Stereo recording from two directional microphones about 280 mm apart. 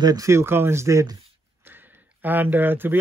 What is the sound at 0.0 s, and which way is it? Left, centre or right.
Speech, centre.